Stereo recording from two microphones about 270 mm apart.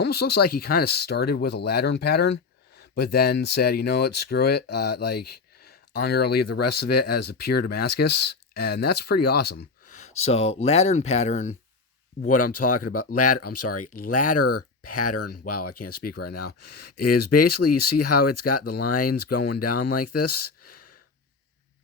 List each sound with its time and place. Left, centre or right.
0.0 s speech: left
5.6 s a sound: left
6.4 s speech: left
7.3 s speech: left
8.0 s speech: left
8.5 s speech: left
12.3 s speech: left